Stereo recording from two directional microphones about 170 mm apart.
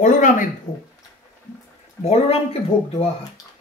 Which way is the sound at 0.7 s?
25° left (ahead or behind).